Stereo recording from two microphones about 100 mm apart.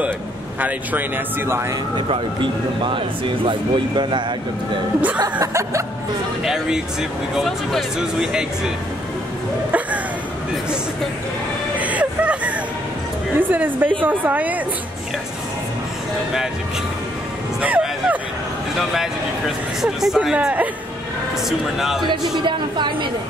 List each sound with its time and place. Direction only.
0.6 s speech: 15° right (ahead or behind)
2.0 s a man's voice: 55° right (ahead or behind)
5.4 s music: 30° right (ahead or behind)
6.4 s speech: 5° right (ahead or behind)
9.7 s a sound: 15° right (ahead or behind)
11.8 s music: 15° right (ahead or behind)
13.4 s a woman's voice: 15° right (ahead or behind)
17.6 s music: 15° right (ahead or behind)
19.8 s a woman's voice: 5° right (ahead or behind)
21.5 s speech: 5° right (ahead or behind)
22.0 s speech: 50° right (ahead or behind)